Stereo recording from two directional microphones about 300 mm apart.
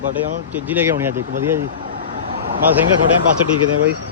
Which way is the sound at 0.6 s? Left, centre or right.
Centre.